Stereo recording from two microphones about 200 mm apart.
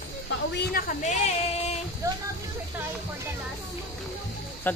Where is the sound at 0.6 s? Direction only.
50° left (ahead or behind).